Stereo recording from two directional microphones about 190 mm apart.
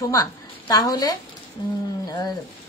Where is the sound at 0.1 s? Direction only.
20° left (ahead or behind).